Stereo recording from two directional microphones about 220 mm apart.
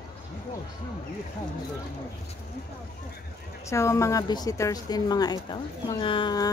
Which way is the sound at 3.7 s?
15° left (ahead or behind).